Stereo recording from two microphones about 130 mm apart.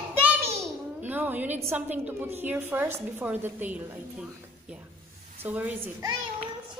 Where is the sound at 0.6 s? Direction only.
15° right (ahead or behind).